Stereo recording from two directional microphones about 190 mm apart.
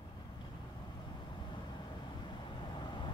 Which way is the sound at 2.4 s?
25° left (ahead or behind).